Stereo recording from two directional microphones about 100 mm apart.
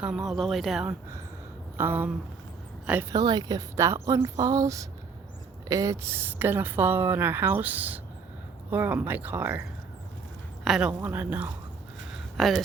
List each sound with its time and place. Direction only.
0.0 s speech: 10° right (ahead or behind)
1.8 s speech: 20° right (ahead or behind)
3.1 s a woman's voice: 45° right (ahead or behind)
3.8 s a woman's voice: 30° right (ahead or behind)
10.6 s speech: 5° right (ahead or behind)
12.4 s speech: centre (ahead or behind)